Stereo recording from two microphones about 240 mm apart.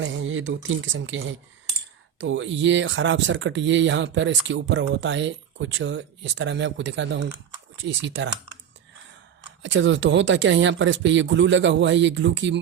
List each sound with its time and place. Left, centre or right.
0.0 s speech: right
9.6 s speech: right